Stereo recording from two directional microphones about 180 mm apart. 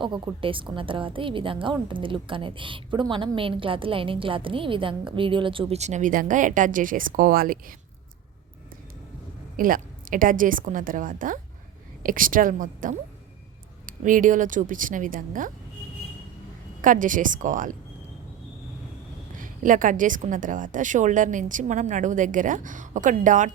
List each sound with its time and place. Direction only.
0.0 s a woman's voice: 30° right (ahead or behind); by 7.8 s 50° right (ahead or behind)
9.6 s a woman's voice: 50° right (ahead or behind)
16.8 s a woman's voice: 45° right (ahead or behind)
19.4 s a woman's voice: 45° right (ahead or behind)